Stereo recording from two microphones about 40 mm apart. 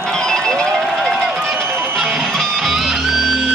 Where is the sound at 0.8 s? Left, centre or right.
Centre.